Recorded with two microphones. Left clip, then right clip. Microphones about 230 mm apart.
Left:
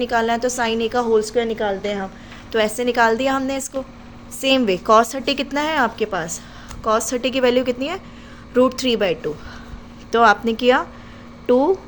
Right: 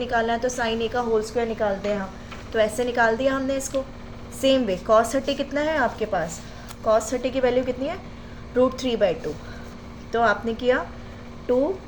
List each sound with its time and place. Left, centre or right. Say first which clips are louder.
0.0 s a woman's voice: left 4 dB; left